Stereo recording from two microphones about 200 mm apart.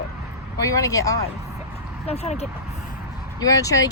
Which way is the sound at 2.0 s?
30° left (ahead or behind).